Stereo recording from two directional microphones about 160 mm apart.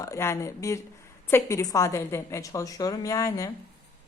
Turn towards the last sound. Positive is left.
turn(degrees=20)  # may be behind; listen again after turning